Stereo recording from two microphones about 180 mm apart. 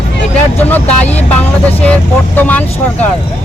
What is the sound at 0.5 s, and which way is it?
Speech, 10° left (ahead or behind).